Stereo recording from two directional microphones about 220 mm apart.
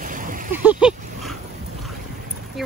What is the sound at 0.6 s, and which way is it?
Vehicle, 5° right (ahead or behind).